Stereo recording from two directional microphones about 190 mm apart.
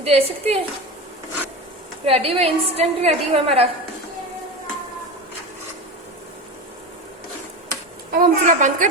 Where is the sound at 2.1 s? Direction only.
30° right (ahead or behind).